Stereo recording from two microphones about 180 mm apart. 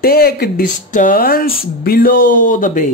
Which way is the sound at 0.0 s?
60° left (ahead or behind).